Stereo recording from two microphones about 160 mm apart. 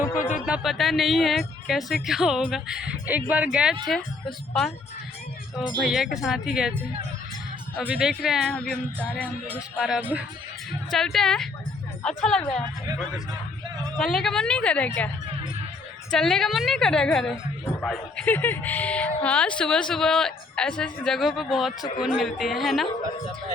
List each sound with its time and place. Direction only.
0.3 s a woman's voice: 5° right (ahead or behind)
5.8 s speech: 5° right (ahead or behind)
7.8 s speech: centre (ahead or behind)
9.7 s speech: centre (ahead or behind)
10.9 s speech: 5° left (ahead or behind)
13.9 s speech: 5° left (ahead or behind)
16.1 s speech: centre (ahead or behind)
21.8 s speech: 25° left (ahead or behind)
22.2 s speech: centre (ahead or behind)